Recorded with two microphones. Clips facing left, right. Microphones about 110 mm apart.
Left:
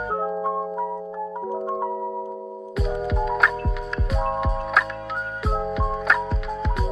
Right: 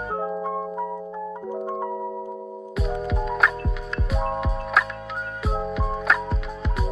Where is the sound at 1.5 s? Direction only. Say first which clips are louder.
Left 2 dB; 15° left (ahead or behind).